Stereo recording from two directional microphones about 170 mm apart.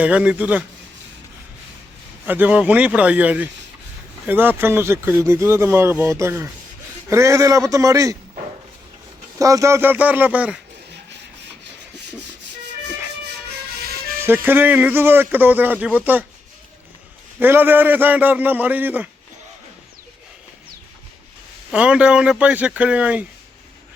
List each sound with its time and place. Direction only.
0.0 s speech: 5° right (ahead or behind)
2.2 s a man's voice: 10° right (ahead or behind)
9.4 s speech: 20° right (ahead or behind)
14.2 s speech: 10° right (ahead or behind)
17.4 s speech: 10° right (ahead or behind)
21.7 s speech: 5° right (ahead or behind)